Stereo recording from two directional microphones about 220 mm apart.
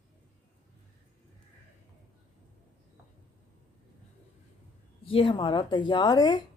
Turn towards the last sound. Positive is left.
turn(degrees=20)  # may be behind; listen again after turning